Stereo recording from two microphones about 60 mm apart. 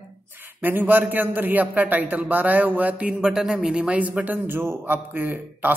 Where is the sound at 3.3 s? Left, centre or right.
Centre.